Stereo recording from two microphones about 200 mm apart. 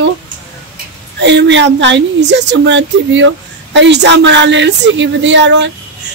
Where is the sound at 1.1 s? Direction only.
60° right (ahead or behind).